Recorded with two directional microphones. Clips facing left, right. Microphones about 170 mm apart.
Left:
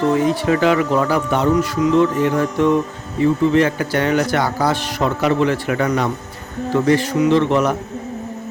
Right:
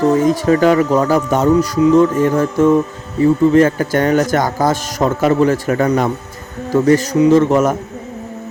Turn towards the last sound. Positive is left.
turn(degrees=-45)  # may be behind; listen again after turning